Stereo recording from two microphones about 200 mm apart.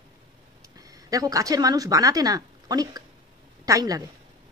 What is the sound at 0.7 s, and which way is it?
A woman's voice, 15° right (ahead or behind).